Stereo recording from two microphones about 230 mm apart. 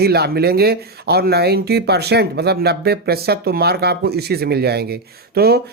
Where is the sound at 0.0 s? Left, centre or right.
Right.